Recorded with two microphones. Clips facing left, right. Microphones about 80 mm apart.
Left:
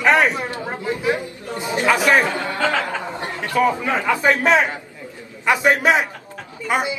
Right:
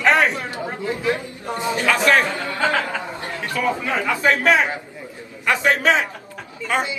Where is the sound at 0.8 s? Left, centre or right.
Centre.